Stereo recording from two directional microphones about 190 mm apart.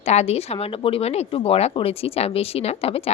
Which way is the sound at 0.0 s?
35° left (ahead or behind).